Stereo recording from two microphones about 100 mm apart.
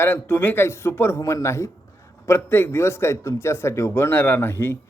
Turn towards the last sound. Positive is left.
turn(degrees=25)  # may be behind; listen again after turning